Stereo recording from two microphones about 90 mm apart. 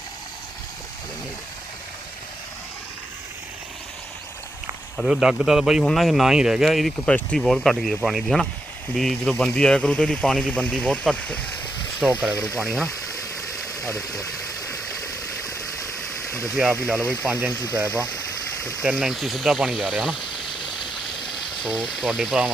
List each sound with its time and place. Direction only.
4.9 s speech: 5° right (ahead or behind)
7.0 s speech: 10° left (ahead or behind)
11.9 s speech: centre (ahead or behind)
13.1 s a sound: 40° left (ahead or behind)
15.4 s stream: 35° left (ahead or behind)
16.8 s speech: 5° right (ahead or behind)
18.8 s speech: 5° right (ahead or behind)
20.9 s water: centre (ahead or behind)